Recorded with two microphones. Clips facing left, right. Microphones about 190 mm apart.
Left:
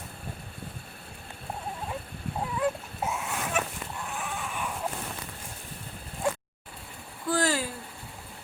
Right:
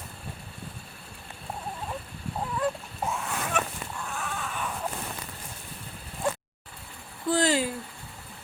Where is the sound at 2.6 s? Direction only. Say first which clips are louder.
Left 1 dB; 5° left (ahead or behind).